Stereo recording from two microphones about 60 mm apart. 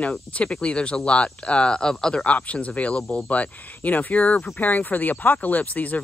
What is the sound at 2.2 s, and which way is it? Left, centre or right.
Speech, left.